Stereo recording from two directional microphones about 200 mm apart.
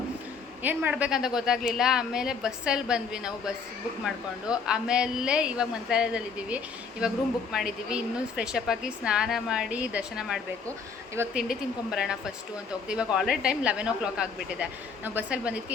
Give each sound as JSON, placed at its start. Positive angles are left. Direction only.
{"t": 0.6, "sound": "a woman's voice", "side_deg": -10}
{"t": 4.6, "sound": "a woman's voice", "side_deg": -5}